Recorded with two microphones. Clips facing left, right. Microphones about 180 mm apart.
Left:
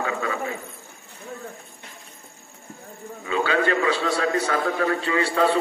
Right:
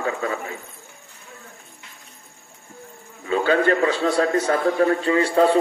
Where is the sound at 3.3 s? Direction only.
45° right (ahead or behind).